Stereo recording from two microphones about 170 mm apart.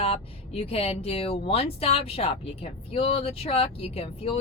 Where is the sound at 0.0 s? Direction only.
35° left (ahead or behind).